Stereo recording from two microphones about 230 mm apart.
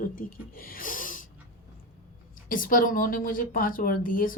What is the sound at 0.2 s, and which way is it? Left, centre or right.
Speech, left.